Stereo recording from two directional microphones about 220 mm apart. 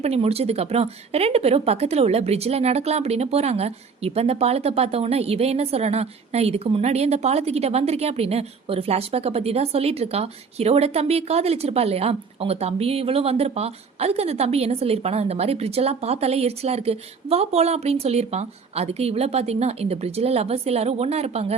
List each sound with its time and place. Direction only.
0.0 s speech: 30° right (ahead or behind)